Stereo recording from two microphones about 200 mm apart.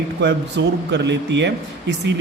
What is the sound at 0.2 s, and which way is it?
Speech, 60° right (ahead or behind).